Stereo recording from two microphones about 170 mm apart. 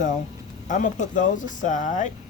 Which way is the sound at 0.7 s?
50° left (ahead or behind).